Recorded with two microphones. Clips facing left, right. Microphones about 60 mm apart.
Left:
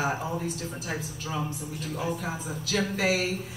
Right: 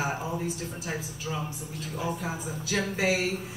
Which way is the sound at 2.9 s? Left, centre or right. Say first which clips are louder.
Even; centre.